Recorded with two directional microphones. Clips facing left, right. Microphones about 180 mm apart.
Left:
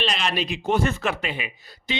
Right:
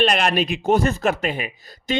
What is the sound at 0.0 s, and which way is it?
Speech, 50° right (ahead or behind).